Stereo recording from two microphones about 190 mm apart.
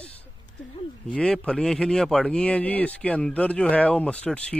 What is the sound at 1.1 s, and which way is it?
Speech, 5° left (ahead or behind).